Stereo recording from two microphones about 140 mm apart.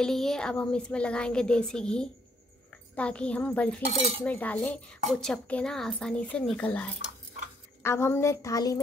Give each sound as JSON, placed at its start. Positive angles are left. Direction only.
{"t": 0.0, "sound": "a woman's voice", "side_deg": 5}